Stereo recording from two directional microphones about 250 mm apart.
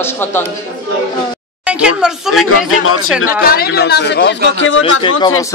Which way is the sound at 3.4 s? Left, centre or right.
Left.